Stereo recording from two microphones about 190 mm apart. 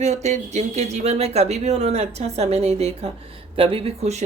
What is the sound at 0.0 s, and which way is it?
Speech, 35° right (ahead or behind).